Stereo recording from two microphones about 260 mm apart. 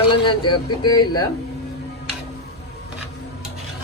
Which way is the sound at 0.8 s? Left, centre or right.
Centre.